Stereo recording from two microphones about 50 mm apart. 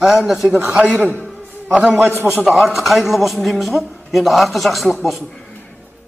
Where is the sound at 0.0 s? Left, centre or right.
Centre.